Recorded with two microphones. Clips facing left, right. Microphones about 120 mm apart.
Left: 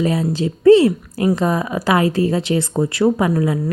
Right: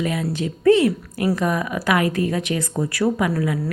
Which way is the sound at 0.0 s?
30° left (ahead or behind).